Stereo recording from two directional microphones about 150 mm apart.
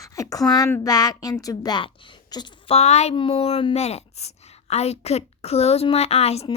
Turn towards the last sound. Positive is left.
turn(degrees=45)  # may be behind; listen again after turning